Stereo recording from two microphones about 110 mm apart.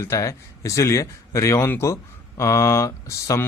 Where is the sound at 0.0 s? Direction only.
25° left (ahead or behind).